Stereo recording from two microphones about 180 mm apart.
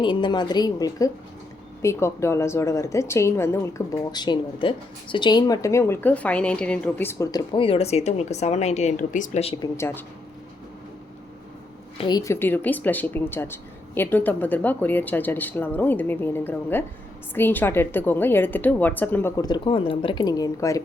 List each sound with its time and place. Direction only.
0.0 s speech: 25° left (ahead or behind)
9.7 s speech: 15° left (ahead or behind)
12.0 s speech: 20° left (ahead or behind)
19.4 s speech: 25° left (ahead or behind)